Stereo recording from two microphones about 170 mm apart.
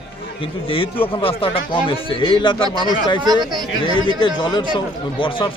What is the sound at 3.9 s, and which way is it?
Speech, 25° left (ahead or behind).